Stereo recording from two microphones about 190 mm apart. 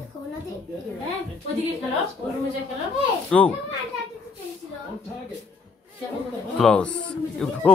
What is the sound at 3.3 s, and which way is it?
Speech, centre (ahead or behind).